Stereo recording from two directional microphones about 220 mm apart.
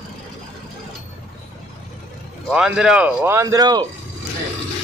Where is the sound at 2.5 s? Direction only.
5° right (ahead or behind).